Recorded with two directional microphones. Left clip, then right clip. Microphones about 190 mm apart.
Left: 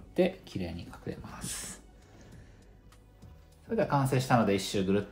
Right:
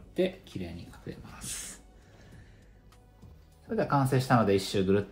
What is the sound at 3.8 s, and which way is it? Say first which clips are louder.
Speech: right 1 dB; 20° right (ahead or behind).